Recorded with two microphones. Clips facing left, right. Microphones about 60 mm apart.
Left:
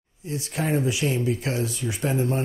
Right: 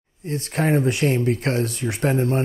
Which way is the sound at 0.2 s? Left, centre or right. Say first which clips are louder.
Right 5 dB; right.